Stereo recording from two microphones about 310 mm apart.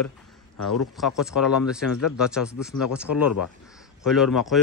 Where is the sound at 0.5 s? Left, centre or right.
Left.